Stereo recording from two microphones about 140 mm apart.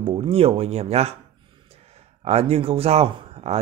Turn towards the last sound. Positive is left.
turn(degrees=-45)  # may be behind; listen again after turning